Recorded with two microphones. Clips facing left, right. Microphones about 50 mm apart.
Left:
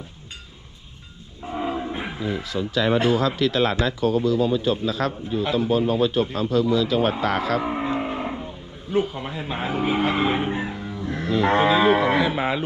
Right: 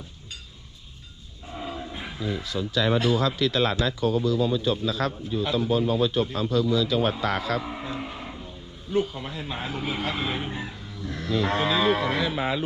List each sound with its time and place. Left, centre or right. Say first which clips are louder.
1.5 s dog: left 8 dB; left
2.8 s speech: left 3 dB; left
3.3 s speech: left 3 dB; left
4.2 s a man's voice: left 3 dB; left
7.6 s livestock: left 8 dB; left
8.9 s speech: left 3 dB; left